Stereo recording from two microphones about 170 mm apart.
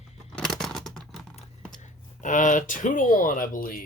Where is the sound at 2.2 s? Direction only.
50° left (ahead or behind).